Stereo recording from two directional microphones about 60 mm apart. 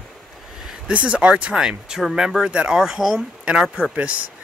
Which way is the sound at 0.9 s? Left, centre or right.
Centre.